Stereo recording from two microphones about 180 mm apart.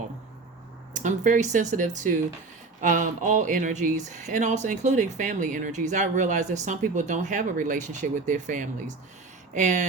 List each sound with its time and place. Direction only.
0.9 s speech: 45° right (ahead or behind)